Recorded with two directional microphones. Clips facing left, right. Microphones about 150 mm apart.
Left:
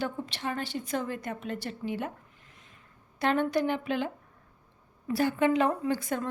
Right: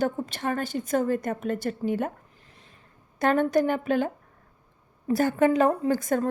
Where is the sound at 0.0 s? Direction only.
45° right (ahead or behind).